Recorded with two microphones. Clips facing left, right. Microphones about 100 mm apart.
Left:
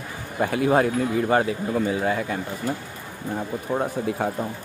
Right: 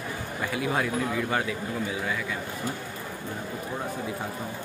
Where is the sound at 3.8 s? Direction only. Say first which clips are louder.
Left 8 dB; 60° left (ahead or behind).